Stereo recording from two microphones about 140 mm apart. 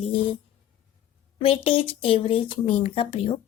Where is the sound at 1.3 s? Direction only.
45° left (ahead or behind).